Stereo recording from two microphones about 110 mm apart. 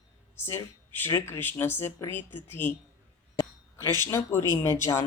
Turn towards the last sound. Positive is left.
turn(degrees=25)  # may be behind; listen again after turning